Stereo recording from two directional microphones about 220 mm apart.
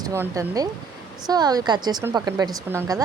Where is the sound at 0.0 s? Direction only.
15° right (ahead or behind).